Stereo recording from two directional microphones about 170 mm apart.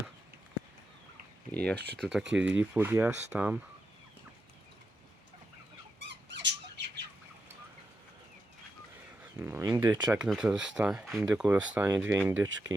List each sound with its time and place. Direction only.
1.5 s speech: 5° left (ahead or behind)
2.3 s speech: 10° right (ahead or behind)
6.1 s squeak: 90° right
9.4 s a sound: 15° right (ahead or behind)
10.1 s speech: 5° right (ahead or behind)